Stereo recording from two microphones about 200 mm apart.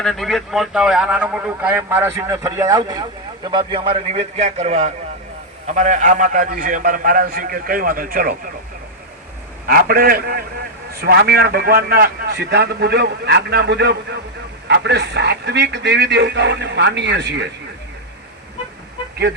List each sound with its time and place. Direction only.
0.0 s a man's voice: centre (ahead or behind); by 8.4 s 45° right (ahead or behind)
9.6 s a man's voice: 50° right (ahead or behind)